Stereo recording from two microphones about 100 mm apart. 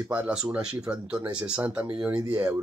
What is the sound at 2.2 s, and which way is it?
Speech, 35° right (ahead or behind).